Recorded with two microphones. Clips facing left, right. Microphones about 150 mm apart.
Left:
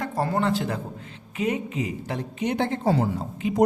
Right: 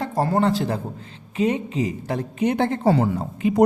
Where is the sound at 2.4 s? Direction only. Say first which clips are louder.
Right 4 dB; 55° right (ahead or behind).